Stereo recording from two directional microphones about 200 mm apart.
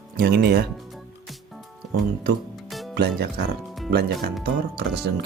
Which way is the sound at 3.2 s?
50° right (ahead or behind).